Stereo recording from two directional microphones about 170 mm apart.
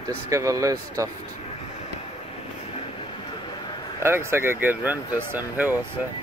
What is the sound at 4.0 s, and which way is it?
Speech, 15° right (ahead or behind).